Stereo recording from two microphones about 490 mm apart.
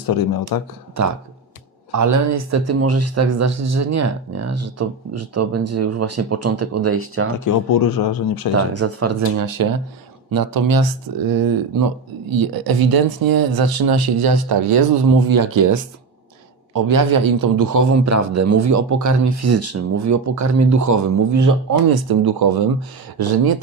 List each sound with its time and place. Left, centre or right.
0.0 s speech: left
1.9 s speech: right
7.3 s speech: left
8.5 s speech: right